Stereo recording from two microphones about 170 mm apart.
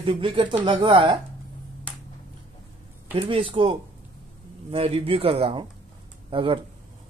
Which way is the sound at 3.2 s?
30° right (ahead or behind).